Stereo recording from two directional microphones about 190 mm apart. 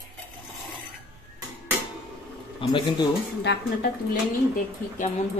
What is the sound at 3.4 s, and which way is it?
Speech, 65° left (ahead or behind).